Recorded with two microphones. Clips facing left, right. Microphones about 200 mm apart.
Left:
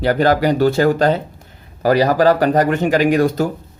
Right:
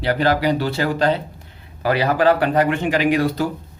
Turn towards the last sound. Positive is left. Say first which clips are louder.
# left 4 dB
turn(degrees=45)  # may be behind; listen again after turning